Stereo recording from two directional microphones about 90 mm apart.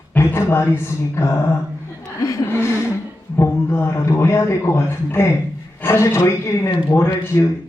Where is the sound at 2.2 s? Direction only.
40° left (ahead or behind).